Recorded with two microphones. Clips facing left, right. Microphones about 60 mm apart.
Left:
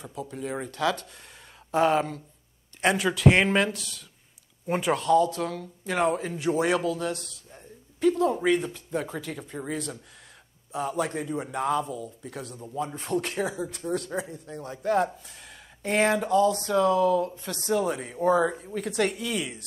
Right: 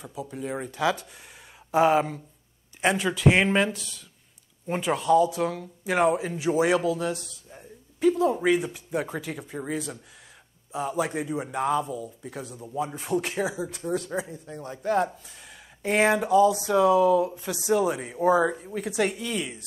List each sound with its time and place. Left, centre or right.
0.0 s speech: centre